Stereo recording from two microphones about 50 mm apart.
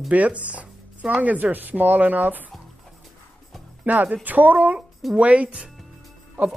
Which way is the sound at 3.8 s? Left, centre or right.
Right.